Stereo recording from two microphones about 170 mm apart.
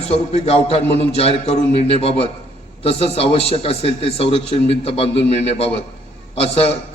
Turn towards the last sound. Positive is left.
turn(degrees=35)  # may be behind; listen again after turning